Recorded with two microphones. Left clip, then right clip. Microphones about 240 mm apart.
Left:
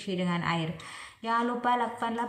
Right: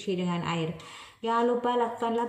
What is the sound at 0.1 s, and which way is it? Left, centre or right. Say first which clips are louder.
Speech: left 1 dB; centre.